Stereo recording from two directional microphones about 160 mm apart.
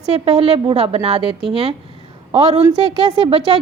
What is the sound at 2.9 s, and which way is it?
Speech, 30° right (ahead or behind).